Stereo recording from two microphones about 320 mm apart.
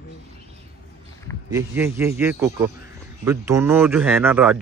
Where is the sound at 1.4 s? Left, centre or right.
Centre.